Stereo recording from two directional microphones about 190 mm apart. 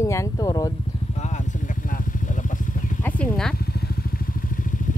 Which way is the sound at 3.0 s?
5° left (ahead or behind).